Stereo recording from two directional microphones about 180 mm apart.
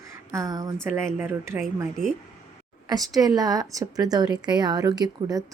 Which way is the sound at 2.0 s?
5° left (ahead or behind).